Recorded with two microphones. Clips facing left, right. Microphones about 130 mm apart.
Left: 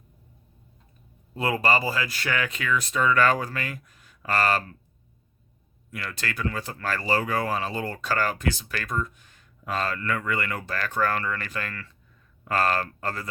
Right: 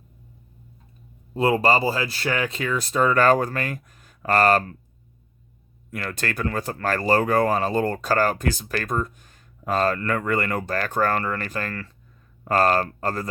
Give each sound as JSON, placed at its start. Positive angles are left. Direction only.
{"t": 1.3, "sound": "speech", "side_deg": -30}
{"t": 5.9, "sound": "speech", "side_deg": -50}